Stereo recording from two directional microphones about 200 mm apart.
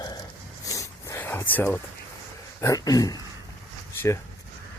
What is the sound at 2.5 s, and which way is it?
Speech, 15° left (ahead or behind).